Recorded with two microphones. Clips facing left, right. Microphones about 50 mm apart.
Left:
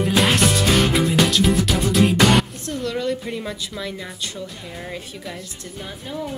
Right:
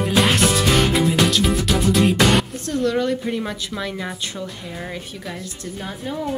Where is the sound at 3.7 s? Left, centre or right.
Centre.